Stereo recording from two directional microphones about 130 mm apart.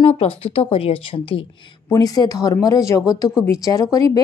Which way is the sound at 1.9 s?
30° left (ahead or behind).